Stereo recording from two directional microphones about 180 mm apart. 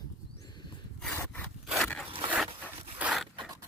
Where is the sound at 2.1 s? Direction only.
30° right (ahead or behind).